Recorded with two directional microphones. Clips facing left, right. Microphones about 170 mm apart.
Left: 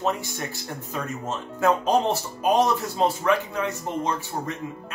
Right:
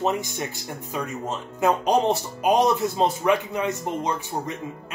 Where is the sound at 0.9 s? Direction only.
15° right (ahead or behind).